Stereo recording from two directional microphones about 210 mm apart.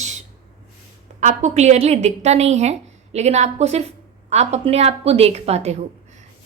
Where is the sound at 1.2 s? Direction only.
35° right (ahead or behind).